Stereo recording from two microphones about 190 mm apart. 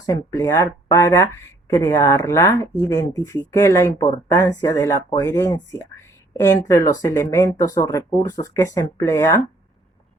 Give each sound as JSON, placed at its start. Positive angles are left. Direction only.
{"t": 0.0, "sound": "speech", "side_deg": 15}